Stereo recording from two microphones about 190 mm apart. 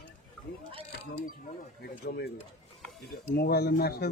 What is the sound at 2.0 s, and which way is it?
Speech, 60° left (ahead or behind).